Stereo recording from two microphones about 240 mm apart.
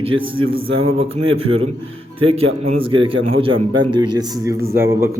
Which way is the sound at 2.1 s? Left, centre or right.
Right.